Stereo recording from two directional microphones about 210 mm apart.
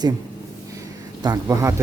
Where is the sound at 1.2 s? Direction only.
15° right (ahead or behind).